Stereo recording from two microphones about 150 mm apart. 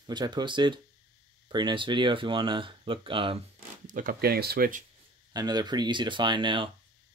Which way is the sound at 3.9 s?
65° right (ahead or behind).